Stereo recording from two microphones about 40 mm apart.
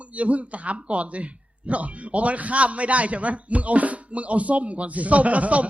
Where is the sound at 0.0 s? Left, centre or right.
Right.